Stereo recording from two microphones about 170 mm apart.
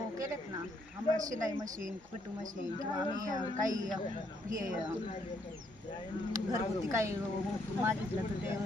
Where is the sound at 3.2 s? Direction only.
20° right (ahead or behind).